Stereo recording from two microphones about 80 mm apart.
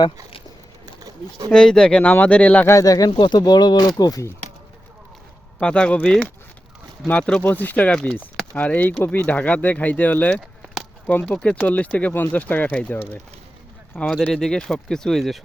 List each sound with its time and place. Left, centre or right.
1.5 s speech: centre
2.6 s speech: left
3.2 s speech: left
5.5 s speech: centre
7.1 s speech: centre
14.3 s speech: centre